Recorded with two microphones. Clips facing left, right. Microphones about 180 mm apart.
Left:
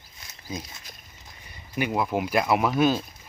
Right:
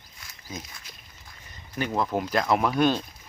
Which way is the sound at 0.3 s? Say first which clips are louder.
Left 4 dB; 20° left (ahead or behind).